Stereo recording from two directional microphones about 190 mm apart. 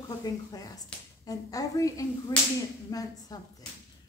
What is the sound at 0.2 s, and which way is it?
Speech, 20° left (ahead or behind).